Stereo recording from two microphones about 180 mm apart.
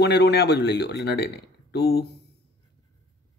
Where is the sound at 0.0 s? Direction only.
65° left (ahead or behind).